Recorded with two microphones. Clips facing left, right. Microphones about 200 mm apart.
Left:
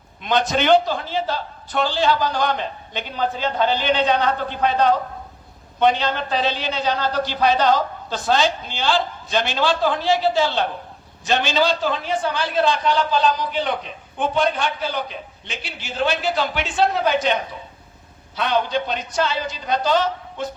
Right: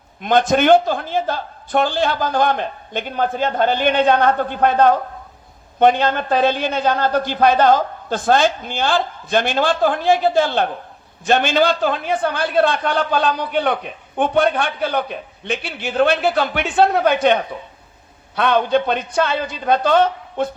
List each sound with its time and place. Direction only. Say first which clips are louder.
0.2 s a man's voice: right 5 dB; 50° right (ahead or behind)